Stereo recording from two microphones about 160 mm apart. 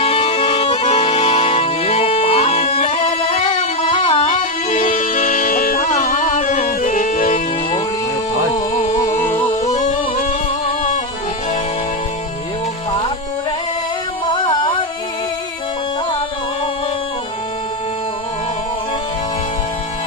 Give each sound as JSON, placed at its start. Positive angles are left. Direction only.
{"t": 0.0, "sound": "music", "side_deg": 35}
{"t": 8.5, "sound": "music", "side_deg": 50}
{"t": 9.0, "sound": "music", "side_deg": 20}
{"t": 9.7, "sound": "music", "side_deg": 55}
{"t": 14.3, "sound": "music", "side_deg": 30}